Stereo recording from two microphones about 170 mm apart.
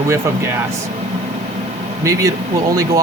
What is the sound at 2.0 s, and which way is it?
Speech, 20° right (ahead or behind).